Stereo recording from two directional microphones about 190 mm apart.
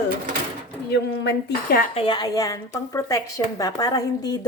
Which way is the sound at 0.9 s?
60° left (ahead or behind).